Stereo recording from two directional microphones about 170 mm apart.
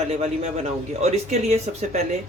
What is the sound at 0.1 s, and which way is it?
A man's voice, 40° right (ahead or behind).